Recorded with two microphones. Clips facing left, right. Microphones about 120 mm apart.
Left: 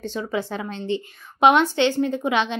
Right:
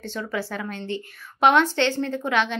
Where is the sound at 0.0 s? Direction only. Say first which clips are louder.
Left 3 dB; 15° left (ahead or behind).